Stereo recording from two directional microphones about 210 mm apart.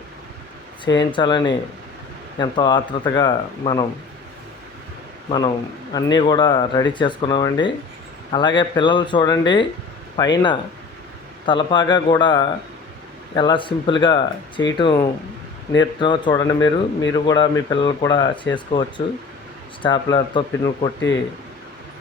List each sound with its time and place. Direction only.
0.9 s speech: 20° left (ahead or behind)
5.9 s speech: 20° left (ahead or behind)
16.6 s speech: 60° left (ahead or behind)
17.2 s speech: 20° left (ahead or behind)